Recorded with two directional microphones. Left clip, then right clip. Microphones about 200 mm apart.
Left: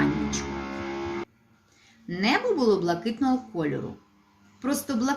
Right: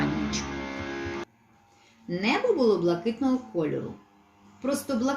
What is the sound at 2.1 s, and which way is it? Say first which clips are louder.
Speech: left 1 dB; 50° left (ahead or behind).